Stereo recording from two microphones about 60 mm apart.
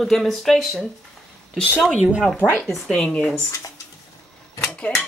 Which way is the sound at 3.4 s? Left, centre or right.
Left.